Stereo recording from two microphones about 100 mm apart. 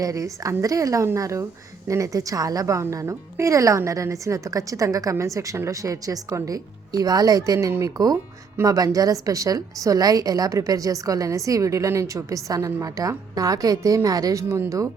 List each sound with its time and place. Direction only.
0.0 s a woman's voice: 35° right (ahead or behind)